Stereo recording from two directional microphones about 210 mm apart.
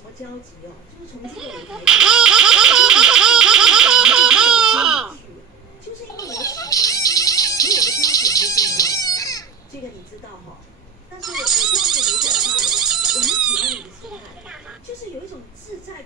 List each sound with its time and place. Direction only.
1.3 s baby laughter: 5° right (ahead or behind)
6.1 s music: 15° left (ahead or behind)
11.1 s a sound: centre (ahead or behind)